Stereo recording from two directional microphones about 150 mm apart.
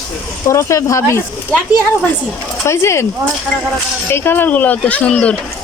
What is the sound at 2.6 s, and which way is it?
Speech, 20° left (ahead or behind).